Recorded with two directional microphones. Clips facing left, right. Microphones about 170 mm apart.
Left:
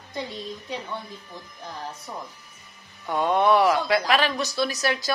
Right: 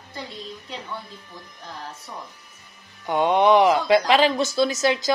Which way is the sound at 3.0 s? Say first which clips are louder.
Right 3 dB; 20° right (ahead or behind).